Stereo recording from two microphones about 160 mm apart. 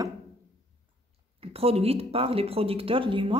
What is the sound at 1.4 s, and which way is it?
Speech, 40° right (ahead or behind).